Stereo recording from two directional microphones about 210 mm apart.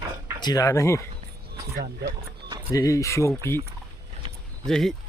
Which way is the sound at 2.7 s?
15° left (ahead or behind).